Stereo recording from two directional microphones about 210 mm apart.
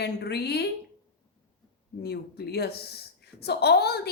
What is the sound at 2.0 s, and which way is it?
A woman's voice, 50° left (ahead or behind).